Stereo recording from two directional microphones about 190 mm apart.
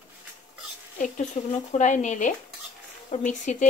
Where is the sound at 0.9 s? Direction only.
40° left (ahead or behind).